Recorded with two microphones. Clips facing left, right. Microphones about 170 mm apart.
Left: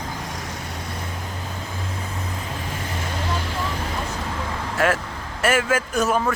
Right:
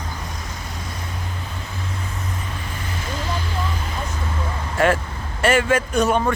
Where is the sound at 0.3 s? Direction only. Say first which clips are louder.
Left 2 dB; 75° left (ahead or behind).